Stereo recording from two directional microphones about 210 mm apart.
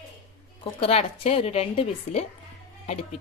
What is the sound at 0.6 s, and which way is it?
A woman's voice, 30° left (ahead or behind).